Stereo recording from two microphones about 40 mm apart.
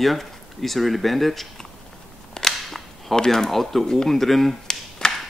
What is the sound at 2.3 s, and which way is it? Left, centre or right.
Cap gun, centre.